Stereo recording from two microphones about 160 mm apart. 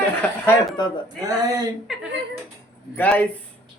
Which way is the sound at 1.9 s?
Centre (ahead or behind).